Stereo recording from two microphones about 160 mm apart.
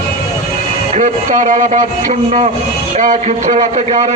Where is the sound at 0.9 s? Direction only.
55° right (ahead or behind).